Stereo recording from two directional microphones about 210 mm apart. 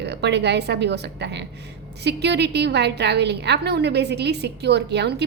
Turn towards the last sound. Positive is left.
turn(degrees=-55)  # may be behind; listen again after turning